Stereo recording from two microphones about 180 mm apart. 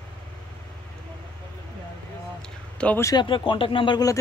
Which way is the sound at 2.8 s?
10° left (ahead or behind).